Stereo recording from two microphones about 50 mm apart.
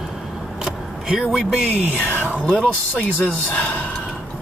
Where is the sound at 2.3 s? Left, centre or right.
Left.